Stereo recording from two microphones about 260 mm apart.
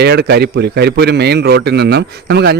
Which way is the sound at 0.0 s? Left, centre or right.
Right.